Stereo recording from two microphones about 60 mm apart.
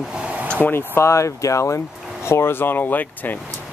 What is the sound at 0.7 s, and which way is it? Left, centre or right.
Speech, left.